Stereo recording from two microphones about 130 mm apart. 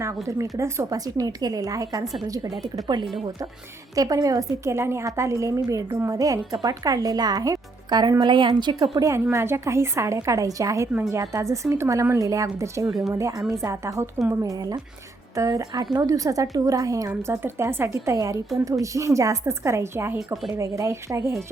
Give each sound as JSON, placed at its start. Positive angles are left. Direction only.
{"t": 0.0, "sound": "a woman's voice", "side_deg": -25}
{"t": 9.0, "sound": "a woman's voice", "side_deg": -25}
{"t": 20.1, "sound": "a woman's voice", "side_deg": 0}
{"t": 20.6, "sound": "a woman's voice", "side_deg": -20}